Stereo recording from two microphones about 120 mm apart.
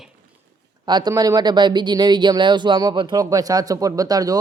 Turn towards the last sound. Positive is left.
turn(degrees=-30)  # may be behind; listen again after turning